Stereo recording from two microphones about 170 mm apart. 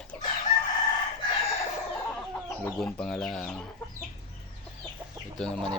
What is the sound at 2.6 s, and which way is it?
Speech, 5° left (ahead or behind).